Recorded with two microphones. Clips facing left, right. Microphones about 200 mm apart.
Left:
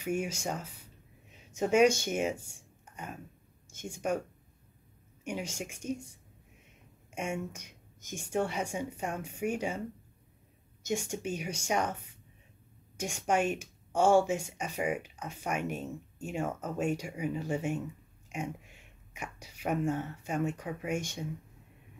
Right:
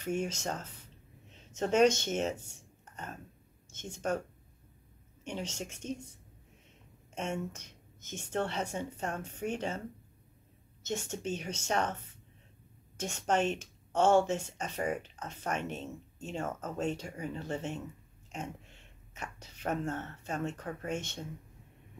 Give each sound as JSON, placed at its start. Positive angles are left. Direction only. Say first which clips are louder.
{"t": 0.0, "sound": "speech", "louder": "left 1 dB", "side_deg": 10}
{"t": 5.2, "sound": "speech", "louder": "left 2 dB", "side_deg": 10}
{"t": 7.2, "sound": "speech", "louder": "left 1 dB", "side_deg": 10}
{"t": 10.8, "sound": "speech", "louder": "left 3 dB", "side_deg": 10}